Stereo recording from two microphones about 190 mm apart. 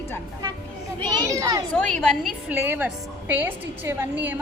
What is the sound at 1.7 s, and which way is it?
Speech, centre (ahead or behind).